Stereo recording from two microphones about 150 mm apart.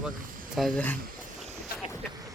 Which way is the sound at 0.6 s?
5° left (ahead or behind).